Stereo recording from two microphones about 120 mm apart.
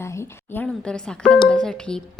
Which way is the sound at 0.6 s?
5° left (ahead or behind).